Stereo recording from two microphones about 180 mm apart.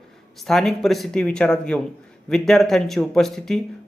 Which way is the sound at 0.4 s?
Centre (ahead or behind).